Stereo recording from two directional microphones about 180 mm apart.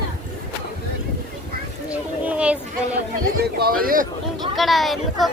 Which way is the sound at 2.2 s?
5° right (ahead or behind).